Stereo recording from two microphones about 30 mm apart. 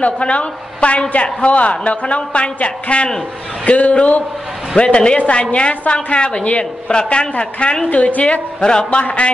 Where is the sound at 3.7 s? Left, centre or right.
Left.